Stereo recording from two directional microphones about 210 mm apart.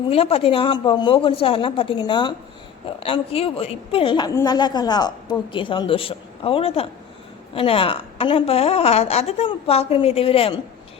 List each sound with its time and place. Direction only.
0.1 s a woman's voice: 25° left (ahead or behind)